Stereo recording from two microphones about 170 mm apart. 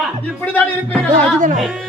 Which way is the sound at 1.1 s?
50° right (ahead or behind).